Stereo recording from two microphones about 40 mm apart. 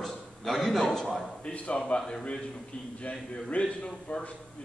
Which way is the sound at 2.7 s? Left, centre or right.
Left.